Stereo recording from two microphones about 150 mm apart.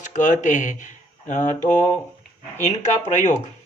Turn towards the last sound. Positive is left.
turn(degrees=50)  # may be behind; listen again after turning